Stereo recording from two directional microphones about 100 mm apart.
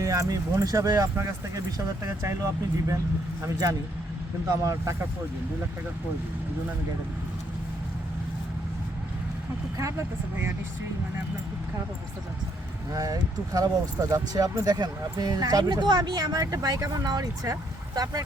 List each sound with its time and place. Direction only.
0.0 s speech: 35° right (ahead or behind)
4.4 s speech: 35° right (ahead or behind)
9.7 s speech: 30° right (ahead or behind)
12.9 s speech: 35° right (ahead or behind)